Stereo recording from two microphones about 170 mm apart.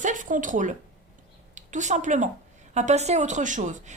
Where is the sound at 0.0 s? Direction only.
50° right (ahead or behind).